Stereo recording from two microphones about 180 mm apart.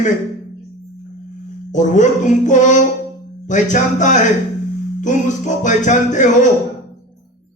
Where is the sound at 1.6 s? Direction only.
40° left (ahead or behind).